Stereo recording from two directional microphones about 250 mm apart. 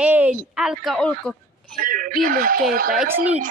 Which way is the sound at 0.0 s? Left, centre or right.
Centre.